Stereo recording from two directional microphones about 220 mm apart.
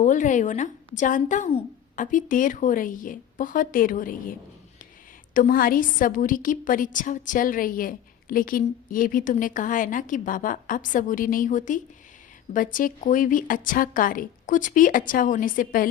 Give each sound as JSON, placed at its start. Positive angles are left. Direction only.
{"t": 0.0, "sound": "a woman's voice", "side_deg": 35}
{"t": 5.3, "sound": "a woman's voice", "side_deg": 40}